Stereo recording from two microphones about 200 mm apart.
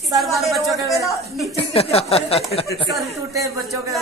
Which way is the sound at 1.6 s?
30° left (ahead or behind).